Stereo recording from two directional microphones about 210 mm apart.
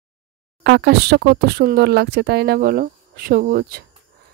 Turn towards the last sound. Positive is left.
turn(degrees=-45)  # may be behind; listen again after turning